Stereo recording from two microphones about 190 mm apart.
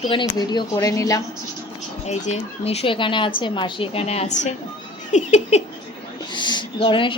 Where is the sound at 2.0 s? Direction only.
35° left (ahead or behind).